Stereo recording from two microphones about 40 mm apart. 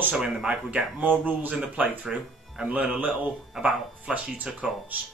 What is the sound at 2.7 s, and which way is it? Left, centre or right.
Speech, right.